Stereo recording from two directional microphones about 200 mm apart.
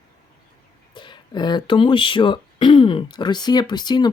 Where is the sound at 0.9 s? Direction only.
25° left (ahead or behind).